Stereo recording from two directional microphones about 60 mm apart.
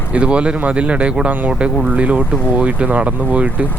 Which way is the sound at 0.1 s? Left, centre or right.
Centre.